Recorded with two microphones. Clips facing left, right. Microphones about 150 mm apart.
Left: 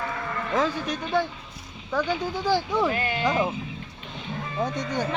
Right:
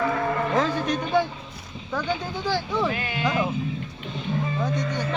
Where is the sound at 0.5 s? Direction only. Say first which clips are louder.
Right 2 dB; 5° left (ahead or behind); by 3.5 s 25° left (ahead or behind).